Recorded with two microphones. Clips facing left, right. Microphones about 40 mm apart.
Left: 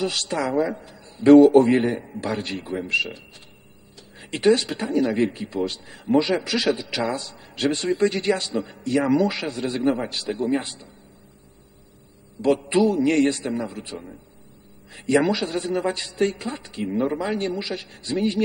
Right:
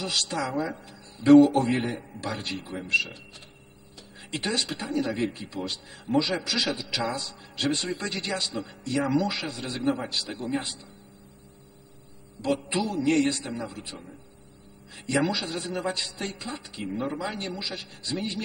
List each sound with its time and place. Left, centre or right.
0.1 s a woman's voice: left
0.5 s a man's voice: left
2.0 s speech: left
7.3 s a sound: left
7.6 s a woman's voice: left
10.0 s a woman's voice: left
10.3 s a man's voice: left
12.4 s a man's voice: left
14.9 s speech: left